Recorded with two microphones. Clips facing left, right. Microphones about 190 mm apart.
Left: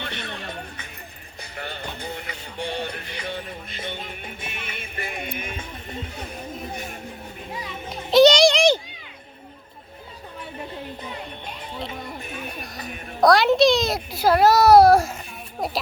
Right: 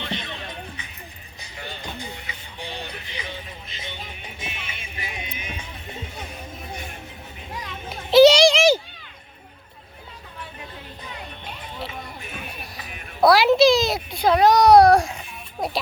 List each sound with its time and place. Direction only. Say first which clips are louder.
0.0 s music: right 2 dB; 55° left (ahead or behind)
1.4 s music: left 3 dB; 55° left (ahead or behind)
7.9 s children playing: right 2 dB; centre (ahead or behind)
12.7 s music: left 5 dB; 5° right (ahead or behind)